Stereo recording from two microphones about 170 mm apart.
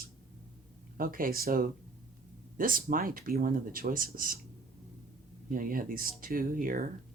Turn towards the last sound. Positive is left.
turn(degrees=-55)  # may be behind; listen again after turning